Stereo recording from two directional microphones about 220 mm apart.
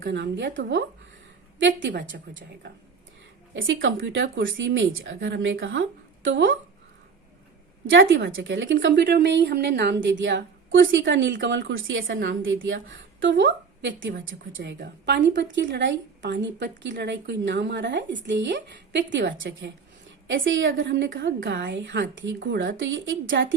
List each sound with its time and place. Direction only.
0.0 s a woman's voice: 55° right (ahead or behind)
3.5 s a woman's voice: 60° right (ahead or behind)
7.9 s a woman's voice: 55° right (ahead or behind)